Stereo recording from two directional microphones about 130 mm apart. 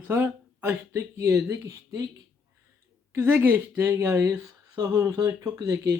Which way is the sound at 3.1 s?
15° right (ahead or behind).